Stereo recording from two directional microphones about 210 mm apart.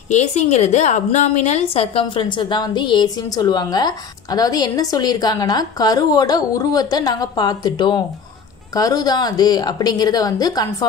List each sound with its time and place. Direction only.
0.1 s a woman's voice: 30° left (ahead or behind)